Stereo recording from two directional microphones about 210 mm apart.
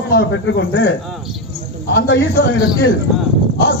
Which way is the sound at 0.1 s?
55° left (ahead or behind).